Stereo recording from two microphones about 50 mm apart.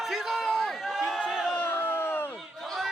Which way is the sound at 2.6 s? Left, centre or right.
Centre.